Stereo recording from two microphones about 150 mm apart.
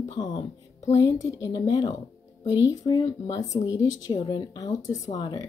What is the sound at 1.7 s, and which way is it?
Speech, 30° left (ahead or behind).